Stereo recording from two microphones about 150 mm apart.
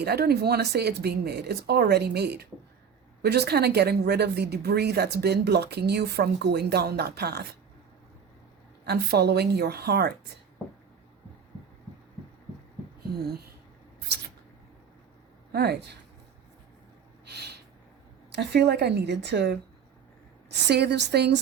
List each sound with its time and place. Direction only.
0.0 s speech: 90° right
8.8 s speech: 90° right
15.5 s speech: 90° right
17.2 s a sound: 90° right
18.3 s speech: 90° right